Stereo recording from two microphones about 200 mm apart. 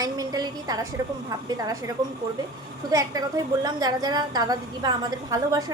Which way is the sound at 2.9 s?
15° right (ahead or behind).